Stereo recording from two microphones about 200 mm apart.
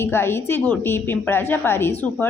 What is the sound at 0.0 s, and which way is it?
A woman's voice, 10° left (ahead or behind).